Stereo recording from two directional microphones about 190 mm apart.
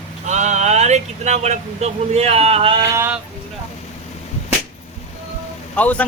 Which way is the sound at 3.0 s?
10° right (ahead or behind).